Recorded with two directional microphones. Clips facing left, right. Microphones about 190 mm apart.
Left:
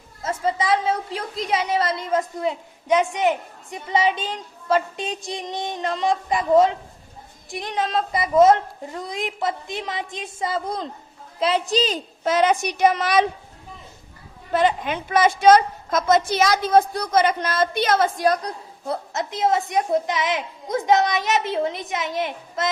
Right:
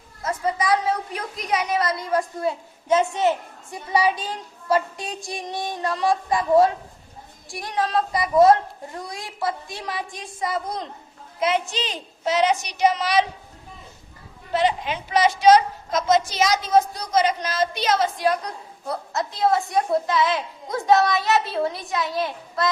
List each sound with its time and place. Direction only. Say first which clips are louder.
0.2 s a woman's voice: left 1 dB; 25° left (ahead or behind); by 13.2 s 50° left (ahead or behind)
14.5 s a woman's voice: left 2 dB; 50° left (ahead or behind)
18.9 s a woman's voice: left 1 dB; 20° left (ahead or behind)